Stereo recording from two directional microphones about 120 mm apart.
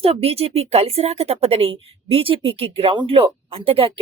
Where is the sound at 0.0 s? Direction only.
55° right (ahead or behind).